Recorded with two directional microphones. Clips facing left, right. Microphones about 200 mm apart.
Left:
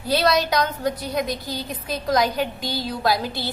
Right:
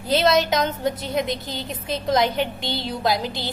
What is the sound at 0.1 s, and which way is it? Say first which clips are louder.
A woman's voice: right 1 dB; 25° right (ahead or behind).